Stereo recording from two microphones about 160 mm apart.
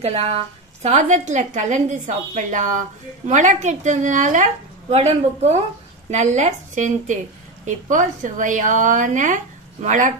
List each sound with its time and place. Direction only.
0.0 s a woman's voice: 40° right (ahead or behind)